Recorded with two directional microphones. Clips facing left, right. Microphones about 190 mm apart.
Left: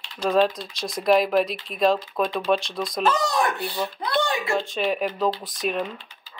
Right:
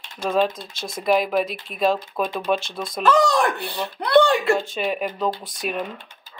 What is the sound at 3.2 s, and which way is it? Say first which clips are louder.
Speech: right 5 dB; 70° right (ahead or behind).